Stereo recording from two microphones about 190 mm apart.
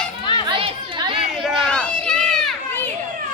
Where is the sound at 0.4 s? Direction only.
25° right (ahead or behind).